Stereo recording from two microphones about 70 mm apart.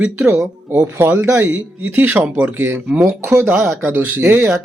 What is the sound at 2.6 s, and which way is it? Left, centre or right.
Speech, right.